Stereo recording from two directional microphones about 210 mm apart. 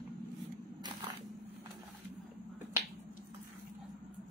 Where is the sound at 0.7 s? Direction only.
20° right (ahead or behind).